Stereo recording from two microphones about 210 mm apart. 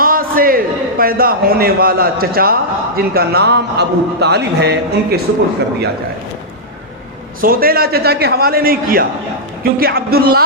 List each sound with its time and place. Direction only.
0.0 s a man's voice: 45° right (ahead or behind)
7.4 s a man's voice: 45° right (ahead or behind)